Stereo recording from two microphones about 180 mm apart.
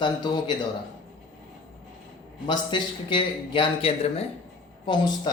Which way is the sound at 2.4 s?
25° left (ahead or behind).